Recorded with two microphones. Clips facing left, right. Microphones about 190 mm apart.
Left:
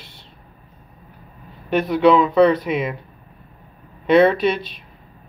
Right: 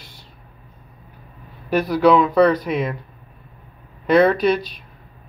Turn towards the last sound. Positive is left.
turn(degrees=0)  # may be behind; listen again after turning